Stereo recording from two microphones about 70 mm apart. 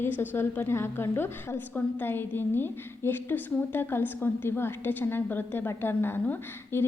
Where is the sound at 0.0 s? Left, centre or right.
Left.